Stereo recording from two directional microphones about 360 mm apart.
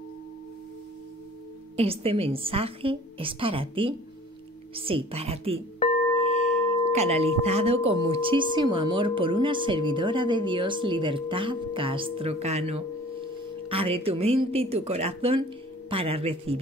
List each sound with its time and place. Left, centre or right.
1.8 s speech: centre
6.9 s speech: centre